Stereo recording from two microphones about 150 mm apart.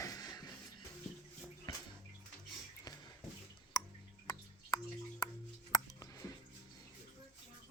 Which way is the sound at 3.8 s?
25° left (ahead or behind).